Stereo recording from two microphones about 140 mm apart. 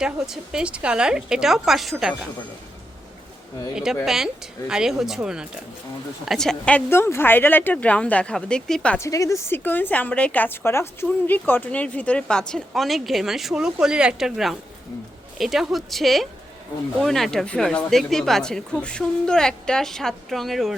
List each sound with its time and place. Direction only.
0.0 s speech: 5° right (ahead or behind)
4.0 s speech: centre (ahead or behind)
9.0 s speech: 25° left (ahead or behind); by 20.7 s centre (ahead or behind)